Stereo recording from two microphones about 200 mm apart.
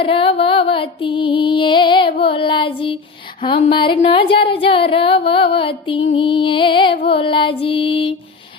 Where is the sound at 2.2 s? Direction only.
25° left (ahead or behind).